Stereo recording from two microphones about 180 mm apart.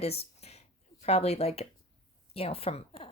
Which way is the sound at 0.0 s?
35° left (ahead or behind).